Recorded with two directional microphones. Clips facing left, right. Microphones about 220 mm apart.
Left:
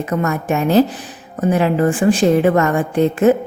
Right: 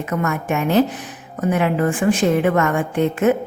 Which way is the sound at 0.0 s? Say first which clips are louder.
Left 3 dB; 35° left (ahead or behind).